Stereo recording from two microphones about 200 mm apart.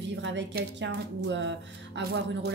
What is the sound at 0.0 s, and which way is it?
A woman's voice, 65° right (ahead or behind).